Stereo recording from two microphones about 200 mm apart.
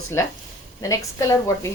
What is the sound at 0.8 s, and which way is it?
Speech, 15° left (ahead or behind).